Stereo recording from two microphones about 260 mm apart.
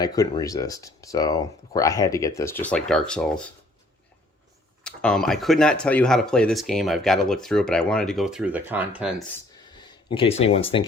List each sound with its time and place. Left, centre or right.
0.0 s speech: centre
4.8 s speech: centre
10.1 s speech: left